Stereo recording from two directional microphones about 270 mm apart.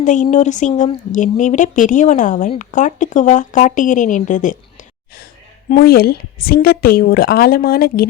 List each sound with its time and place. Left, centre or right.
0.0 s speech: left